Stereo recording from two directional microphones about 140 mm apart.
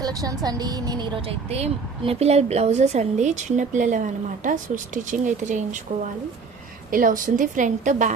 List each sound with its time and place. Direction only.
0.0 s speech: 25° right (ahead or behind); by 5.8 s 60° right (ahead or behind)
6.9 s a woman's voice: 75° right (ahead or behind)